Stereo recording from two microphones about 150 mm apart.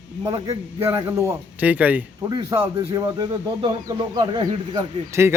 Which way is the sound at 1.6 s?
10° right (ahead or behind).